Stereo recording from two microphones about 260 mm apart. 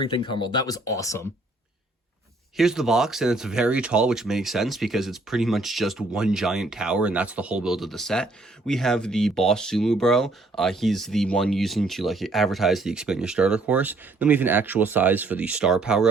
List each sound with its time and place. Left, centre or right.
0.0 s speech: centre
2.6 s speech: centre